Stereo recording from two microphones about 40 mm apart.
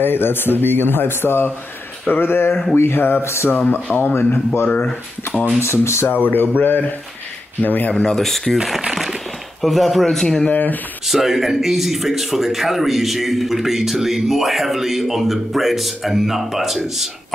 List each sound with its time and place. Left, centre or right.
0.0 s speech: left
2.0 s speech: left
4.0 s speech: left
5.6 s speech: left
6.0 s speech: left
7.9 s speech: centre
9.6 s speech: centre
10.5 s speech: left
11.1 s speech: centre